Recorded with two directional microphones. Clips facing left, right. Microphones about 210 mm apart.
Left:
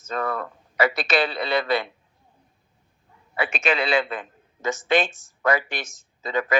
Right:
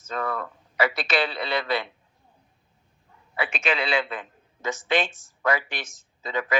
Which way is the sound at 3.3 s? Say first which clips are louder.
Left 3 dB; 45° left (ahead or behind).